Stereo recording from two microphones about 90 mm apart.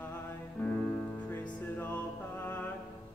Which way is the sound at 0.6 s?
25° left (ahead or behind).